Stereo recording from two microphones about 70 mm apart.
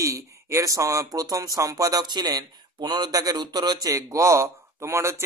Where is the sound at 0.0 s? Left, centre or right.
Right.